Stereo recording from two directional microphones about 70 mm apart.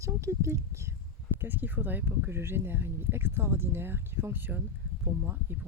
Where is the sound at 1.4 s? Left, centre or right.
Right.